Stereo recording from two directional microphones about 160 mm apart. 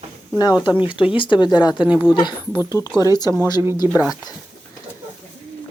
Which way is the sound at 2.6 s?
20° left (ahead or behind).